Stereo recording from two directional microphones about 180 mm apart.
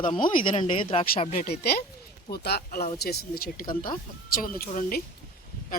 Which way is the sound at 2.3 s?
60° left (ahead or behind).